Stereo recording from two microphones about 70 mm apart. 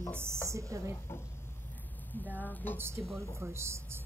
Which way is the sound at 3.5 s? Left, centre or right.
Right.